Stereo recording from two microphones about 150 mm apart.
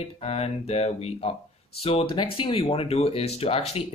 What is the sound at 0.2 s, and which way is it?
Speech, 45° left (ahead or behind).